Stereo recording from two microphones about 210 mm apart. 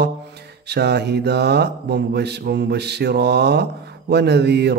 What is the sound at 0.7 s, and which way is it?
Mantra, 50° right (ahead or behind).